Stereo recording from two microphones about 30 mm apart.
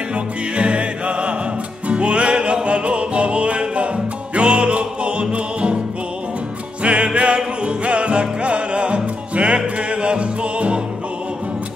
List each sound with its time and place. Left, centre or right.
0.1 s music: right
6.8 s music: right